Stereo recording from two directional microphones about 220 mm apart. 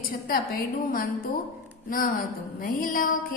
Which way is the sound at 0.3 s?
40° left (ahead or behind).